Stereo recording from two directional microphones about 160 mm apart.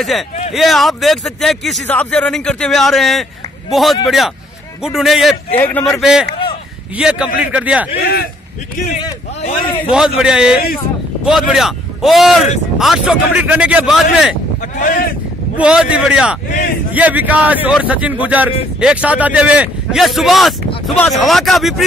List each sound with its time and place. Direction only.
0.5 s a man's voice: centre (ahead or behind)
5.6 s a man's voice: 10° left (ahead or behind); by 7.9 s 10° right (ahead or behind)
8.0 s speech: 70° left (ahead or behind)
8.9 s speech: 40° left (ahead or behind)
9.8 s a man's voice: 5° right (ahead or behind)
14.8 s speech: 65° left (ahead or behind)
15.5 s a man's voice: 5° right (ahead or behind)